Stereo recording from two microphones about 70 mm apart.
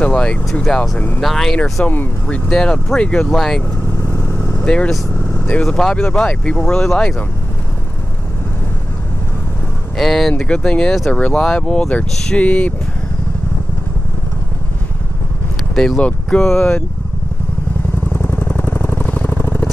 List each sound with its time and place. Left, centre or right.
0.0 s speech: centre
0.5 s speech: centre
0.7 s speech: centre
1.2 s speech: centre
1.8 s speech: centre
3.3 s speech: centre
4.6 s speech: centre
9.9 s speech: centre
10.4 s speech: centre
12.4 s speech: left
15.7 s speech: centre
16.5 s speech: left
18.1 s vehicle: left
19.4 s vehicle: left